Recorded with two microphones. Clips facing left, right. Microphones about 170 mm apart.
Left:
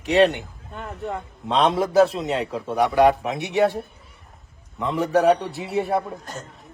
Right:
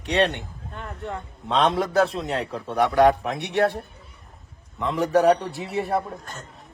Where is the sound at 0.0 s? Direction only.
Centre (ahead or behind).